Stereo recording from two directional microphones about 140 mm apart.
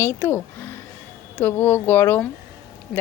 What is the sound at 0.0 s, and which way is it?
Speech, 15° left (ahead or behind).